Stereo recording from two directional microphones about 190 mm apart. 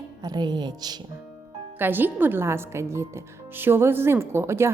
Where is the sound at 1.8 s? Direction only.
10° right (ahead or behind).